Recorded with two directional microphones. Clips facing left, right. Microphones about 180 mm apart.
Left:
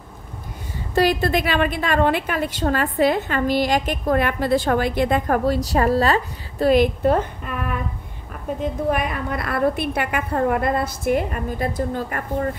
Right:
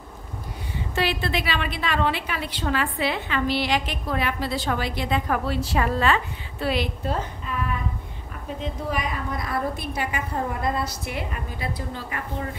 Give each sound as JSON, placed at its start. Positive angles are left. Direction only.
{"t": 0.9, "sound": "a woman's voice", "side_deg": 40}